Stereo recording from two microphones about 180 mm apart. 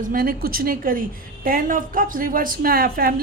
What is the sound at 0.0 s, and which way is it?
A woman's voice, 50° right (ahead or behind).